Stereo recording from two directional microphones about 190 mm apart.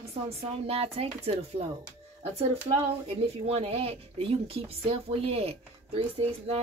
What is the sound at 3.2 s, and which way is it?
Speech, 30° right (ahead or behind).